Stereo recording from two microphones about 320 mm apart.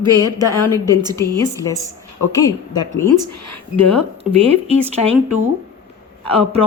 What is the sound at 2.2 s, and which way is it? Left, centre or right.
Speech, centre.